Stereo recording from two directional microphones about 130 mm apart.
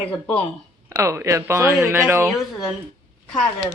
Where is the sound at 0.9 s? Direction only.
20° right (ahead or behind).